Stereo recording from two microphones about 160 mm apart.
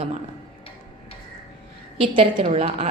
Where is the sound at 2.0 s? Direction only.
40° right (ahead or behind).